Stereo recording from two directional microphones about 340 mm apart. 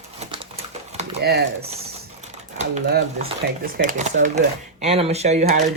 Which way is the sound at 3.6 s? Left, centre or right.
Right.